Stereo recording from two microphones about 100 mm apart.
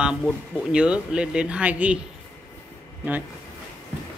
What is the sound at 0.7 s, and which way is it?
Speech, 10° right (ahead or behind).